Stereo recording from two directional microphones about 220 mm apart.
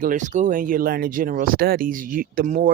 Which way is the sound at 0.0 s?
35° right (ahead or behind).